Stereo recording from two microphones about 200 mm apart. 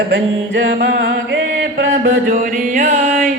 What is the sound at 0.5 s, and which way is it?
Music, 65° right (ahead or behind).